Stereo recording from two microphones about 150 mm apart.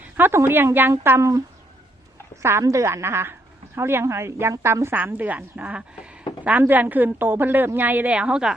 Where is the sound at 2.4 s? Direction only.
20° right (ahead or behind).